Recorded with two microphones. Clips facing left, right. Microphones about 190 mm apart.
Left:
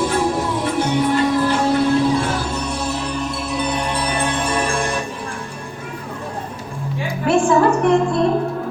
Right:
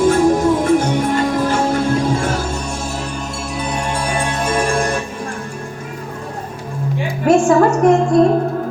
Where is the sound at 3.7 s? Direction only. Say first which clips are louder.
Right 1 dB; 45° right (ahead or behind).